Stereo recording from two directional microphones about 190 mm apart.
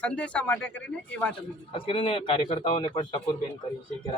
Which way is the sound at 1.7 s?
30° left (ahead or behind).